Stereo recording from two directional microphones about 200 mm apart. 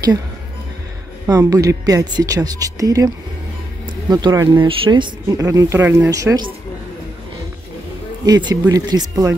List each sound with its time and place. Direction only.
1.2 s speech: 15° right (ahead or behind)
4.1 s speech: 20° right (ahead or behind)
8.3 s speech: 20° right (ahead or behind)